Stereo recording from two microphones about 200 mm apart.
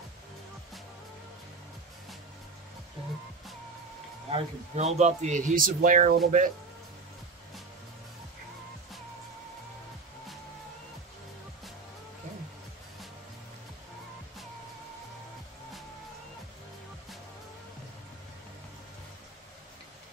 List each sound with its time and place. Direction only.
4.3 s a man's voice: 30° right (ahead or behind)